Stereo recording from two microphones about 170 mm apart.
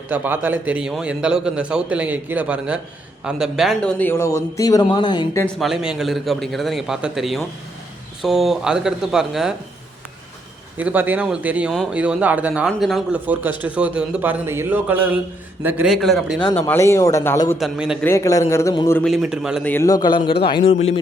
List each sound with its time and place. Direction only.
0.1 s a man's voice: 10° right (ahead or behind); by 5.4 s 25° left (ahead or behind)
5.5 s a man's voice: centre (ahead or behind)
10.8 s a man's voice: 10° right (ahead or behind)
16.5 s a man's voice: 15° left (ahead or behind)
17.6 s a man's voice: 5° right (ahead or behind)
18.0 s a man's voice: 15° left (ahead or behind)
18.9 s a man's voice: centre (ahead or behind)
19.6 s a man's voice: 15° left (ahead or behind)